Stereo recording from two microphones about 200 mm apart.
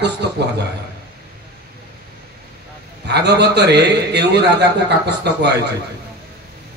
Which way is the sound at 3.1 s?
60° right (ahead or behind).